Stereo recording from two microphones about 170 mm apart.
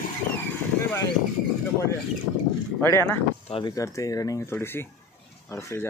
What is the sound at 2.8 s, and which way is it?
Speech, 15° left (ahead or behind).